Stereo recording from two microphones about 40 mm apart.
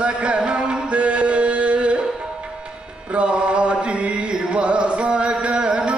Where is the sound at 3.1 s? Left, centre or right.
Right.